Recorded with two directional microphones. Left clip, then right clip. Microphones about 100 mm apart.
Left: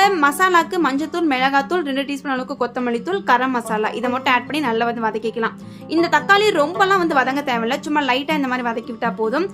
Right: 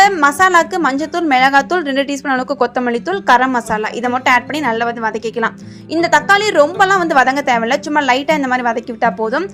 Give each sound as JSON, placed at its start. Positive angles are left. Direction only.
{"t": 0.2, "sound": "a woman's voice", "side_deg": -40}
{"t": 2.8, "sound": "a woman's voice", "side_deg": -40}